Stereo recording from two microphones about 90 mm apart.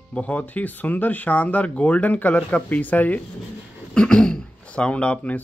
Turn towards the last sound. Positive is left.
turn(degrees=15)  # may be behind; listen again after turning